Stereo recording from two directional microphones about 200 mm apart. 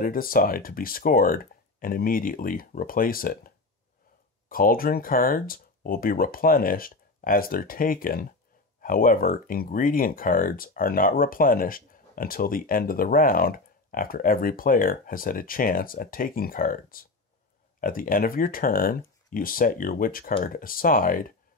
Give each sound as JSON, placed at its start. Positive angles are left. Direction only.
{"t": 0.0, "sound": "speech", "side_deg": 45}